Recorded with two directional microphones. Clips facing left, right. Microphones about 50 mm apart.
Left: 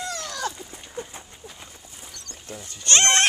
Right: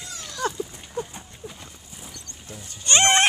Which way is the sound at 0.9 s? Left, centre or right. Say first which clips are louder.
Right 4 dB; centre.